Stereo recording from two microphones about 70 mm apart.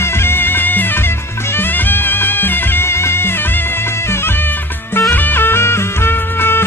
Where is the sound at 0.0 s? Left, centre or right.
Left.